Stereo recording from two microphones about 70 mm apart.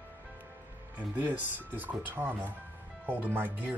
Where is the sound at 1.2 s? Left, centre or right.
Right.